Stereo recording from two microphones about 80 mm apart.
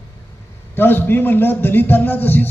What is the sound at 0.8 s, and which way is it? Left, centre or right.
A man's voice, left.